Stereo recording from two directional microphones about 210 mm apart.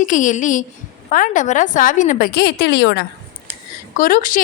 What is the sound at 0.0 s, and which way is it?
Speech, 35° left (ahead or behind).